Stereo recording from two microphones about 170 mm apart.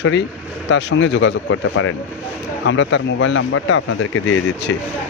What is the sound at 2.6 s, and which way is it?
Speech, 90° left.